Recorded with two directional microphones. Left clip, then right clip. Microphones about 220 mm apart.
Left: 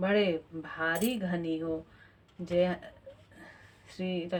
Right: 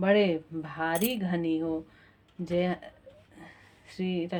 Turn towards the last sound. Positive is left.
turn(degrees=-40)  # may be behind; listen again after turning